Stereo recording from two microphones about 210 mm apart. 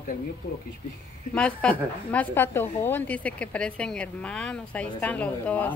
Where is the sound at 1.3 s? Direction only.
5° left (ahead or behind).